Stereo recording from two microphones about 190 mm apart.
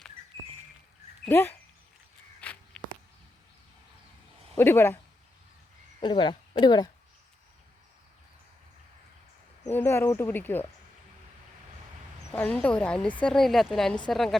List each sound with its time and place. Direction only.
1.2 s speech: 10° left (ahead or behind)
2.4 s walk: 5° left (ahead or behind)
4.5 s speech: 10° left (ahead or behind)
6.0 s speech: 25° left (ahead or behind)
9.7 s speech: 10° left (ahead or behind)
12.3 s a woman's voice: 10° left (ahead or behind)